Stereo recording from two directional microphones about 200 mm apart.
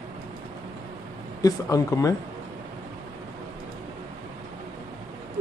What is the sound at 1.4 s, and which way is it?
Speech, 15° left (ahead or behind).